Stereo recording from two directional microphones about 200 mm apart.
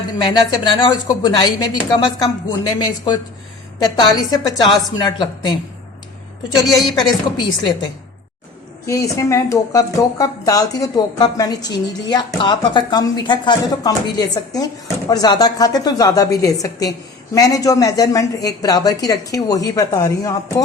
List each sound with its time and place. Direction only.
0.2 s speech: 25° left (ahead or behind)
6.6 s speech: 20° left (ahead or behind)
8.9 s a woman's voice: 15° left (ahead or behind)